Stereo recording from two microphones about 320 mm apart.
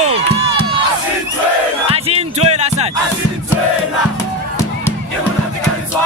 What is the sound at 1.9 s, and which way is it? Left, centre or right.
Music, centre.